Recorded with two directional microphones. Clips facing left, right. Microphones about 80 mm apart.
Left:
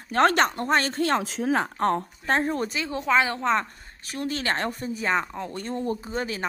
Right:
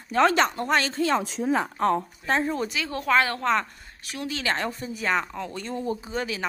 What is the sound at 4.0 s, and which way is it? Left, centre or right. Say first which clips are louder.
Speech: left 2 dB; left.